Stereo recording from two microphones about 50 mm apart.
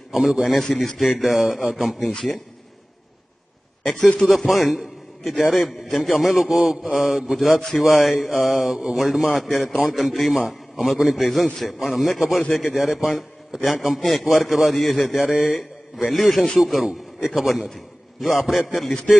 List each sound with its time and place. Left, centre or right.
0.1 s a man's voice: centre
0.8 s a man's voice: centre
4.0 s speech: left
4.3 s a man's voice: centre